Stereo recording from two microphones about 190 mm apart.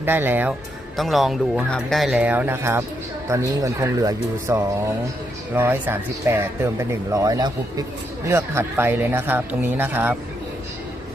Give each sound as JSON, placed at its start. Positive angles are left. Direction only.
{"t": 0.0, "sound": "speech", "side_deg": -10}
{"t": 0.9, "sound": "speech", "side_deg": 0}